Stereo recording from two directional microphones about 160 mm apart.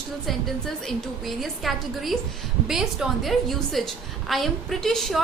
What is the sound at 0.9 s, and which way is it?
A woman's voice, centre (ahead or behind).